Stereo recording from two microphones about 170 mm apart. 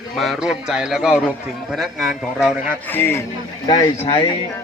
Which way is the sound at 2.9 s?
15° left (ahead or behind).